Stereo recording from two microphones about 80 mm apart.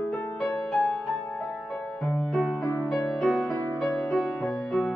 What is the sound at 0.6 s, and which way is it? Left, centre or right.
Music, centre.